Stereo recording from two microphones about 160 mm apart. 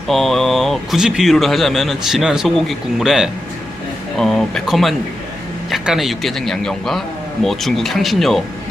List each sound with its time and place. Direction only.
0.1 s speech: centre (ahead or behind)